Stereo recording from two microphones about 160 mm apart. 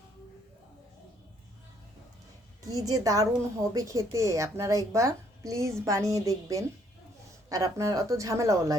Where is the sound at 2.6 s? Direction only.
20° right (ahead or behind).